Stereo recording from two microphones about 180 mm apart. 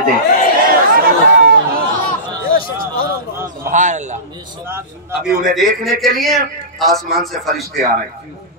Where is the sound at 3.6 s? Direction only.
40° right (ahead or behind).